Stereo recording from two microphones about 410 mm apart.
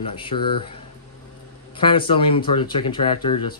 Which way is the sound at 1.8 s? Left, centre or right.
Centre.